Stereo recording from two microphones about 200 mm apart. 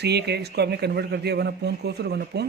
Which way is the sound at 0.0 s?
55° right (ahead or behind).